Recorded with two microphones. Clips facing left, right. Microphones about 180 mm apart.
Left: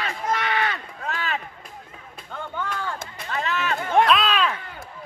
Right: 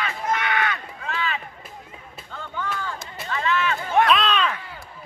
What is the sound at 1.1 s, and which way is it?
Run, 45° left (ahead or behind).